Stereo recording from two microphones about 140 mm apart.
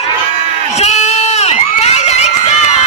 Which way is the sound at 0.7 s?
55° left (ahead or behind).